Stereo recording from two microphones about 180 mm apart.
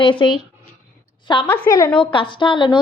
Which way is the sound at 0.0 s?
25° left (ahead or behind).